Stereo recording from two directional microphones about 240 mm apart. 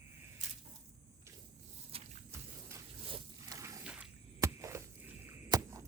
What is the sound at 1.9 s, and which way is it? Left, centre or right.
Vehicle, right.